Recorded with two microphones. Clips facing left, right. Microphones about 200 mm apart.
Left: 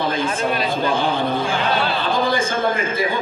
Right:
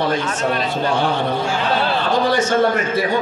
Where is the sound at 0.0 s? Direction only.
70° right (ahead or behind).